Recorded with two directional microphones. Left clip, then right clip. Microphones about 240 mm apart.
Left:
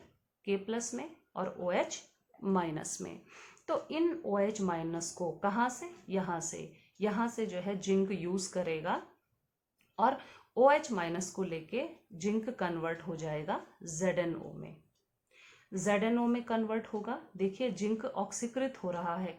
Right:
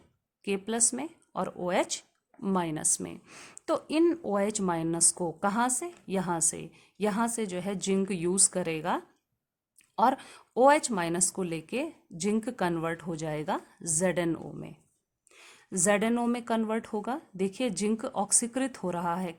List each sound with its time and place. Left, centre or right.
0.4 s speech: right